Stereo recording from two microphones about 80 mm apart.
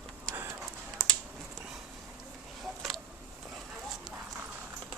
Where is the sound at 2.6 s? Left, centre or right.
Centre.